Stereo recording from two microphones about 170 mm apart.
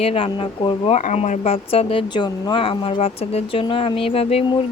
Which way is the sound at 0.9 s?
40° left (ahead or behind).